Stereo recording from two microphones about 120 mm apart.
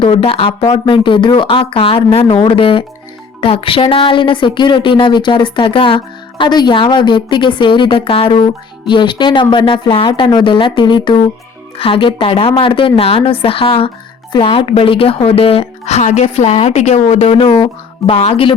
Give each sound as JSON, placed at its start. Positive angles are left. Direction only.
{"t": 0.0, "sound": "speech", "side_deg": 50}